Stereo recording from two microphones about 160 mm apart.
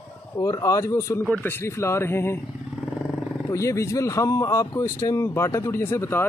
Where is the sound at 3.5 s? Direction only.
20° left (ahead or behind).